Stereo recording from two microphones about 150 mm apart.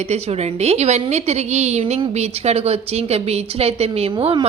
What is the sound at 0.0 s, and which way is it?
A woman's voice, 45° right (ahead or behind).